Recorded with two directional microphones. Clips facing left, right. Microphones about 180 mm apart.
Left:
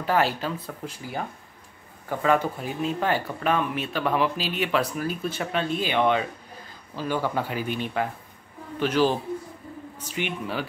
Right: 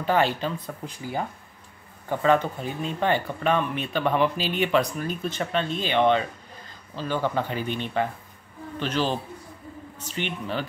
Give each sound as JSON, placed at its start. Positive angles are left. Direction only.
{"t": 0.0, "sound": "speech", "side_deg": 5}
{"t": 2.0, "sound": "speech", "side_deg": 5}